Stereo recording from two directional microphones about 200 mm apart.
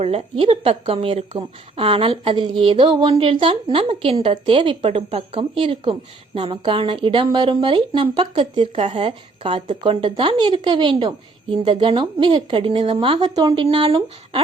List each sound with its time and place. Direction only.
0.0 s a woman's voice: 30° right (ahead or behind)